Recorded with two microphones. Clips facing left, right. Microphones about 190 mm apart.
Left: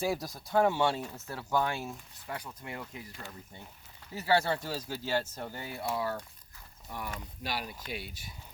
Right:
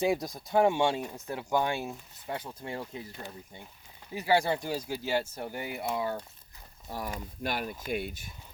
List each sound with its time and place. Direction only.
0.0 s speech: 20° right (ahead or behind)
6.9 s speech: 35° right (ahead or behind)
7.4 s speech: 50° right (ahead or behind)